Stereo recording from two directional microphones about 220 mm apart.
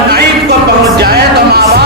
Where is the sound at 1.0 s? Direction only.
45° right (ahead or behind).